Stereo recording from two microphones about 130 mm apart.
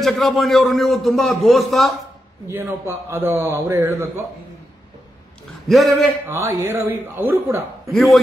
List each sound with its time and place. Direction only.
0.0 s a man's voice: centre (ahead or behind)
2.4 s a man's voice: 15° right (ahead or behind)
5.7 s a man's voice: centre (ahead or behind)
6.2 s a man's voice: 20° right (ahead or behind)